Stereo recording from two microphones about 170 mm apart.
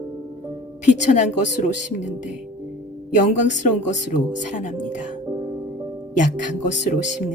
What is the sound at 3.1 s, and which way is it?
Speech, 45° left (ahead or behind).